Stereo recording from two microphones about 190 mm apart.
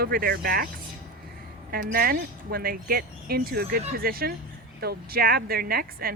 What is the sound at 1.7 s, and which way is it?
Speech, 50° right (ahead or behind).